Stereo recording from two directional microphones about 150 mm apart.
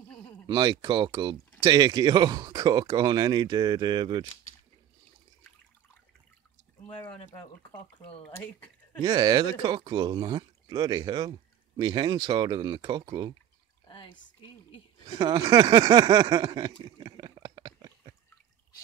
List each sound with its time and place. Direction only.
0.5 s speech: 30° right (ahead or behind)
7.7 s speech: 10° left (ahead or behind)
9.0 s speech: 25° right (ahead or behind)
13.8 s pour: 35° left (ahead or behind)
15.1 s a sound: 35° right (ahead or behind)